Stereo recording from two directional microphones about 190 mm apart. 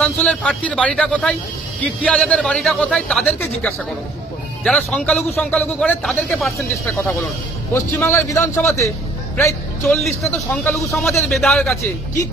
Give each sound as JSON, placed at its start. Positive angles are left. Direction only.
{"t": 0.0, "sound": "a man's voice", "side_deg": 5}
{"t": 9.4, "sound": "a man's voice", "side_deg": 0}